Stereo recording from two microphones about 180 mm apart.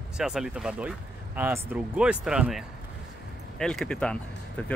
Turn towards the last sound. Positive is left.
turn(degrees=5)  # may be behind; listen again after turning